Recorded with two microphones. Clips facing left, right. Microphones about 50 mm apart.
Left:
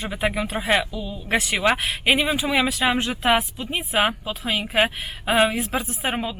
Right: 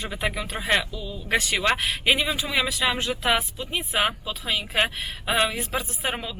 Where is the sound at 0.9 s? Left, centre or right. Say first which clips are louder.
Left 2 dB; left.